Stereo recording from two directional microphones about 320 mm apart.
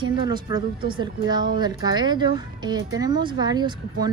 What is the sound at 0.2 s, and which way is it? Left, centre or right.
Speech, centre.